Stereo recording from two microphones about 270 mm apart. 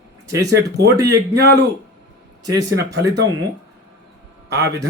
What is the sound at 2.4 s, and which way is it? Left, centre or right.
Speech, centre.